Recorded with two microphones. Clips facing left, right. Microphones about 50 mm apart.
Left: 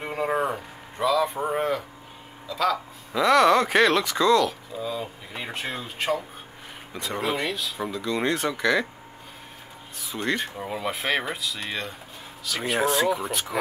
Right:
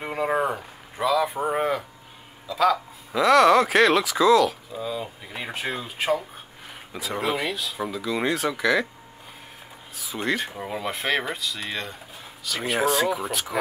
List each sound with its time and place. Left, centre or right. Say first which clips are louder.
0.0 s a sound: right 1 dB; centre
6.9 s speech: right 1 dB; centre
9.9 s speech: right 1 dB; centre